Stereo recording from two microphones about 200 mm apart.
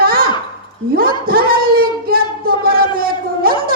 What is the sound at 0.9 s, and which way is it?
Speech, 45° right (ahead or behind).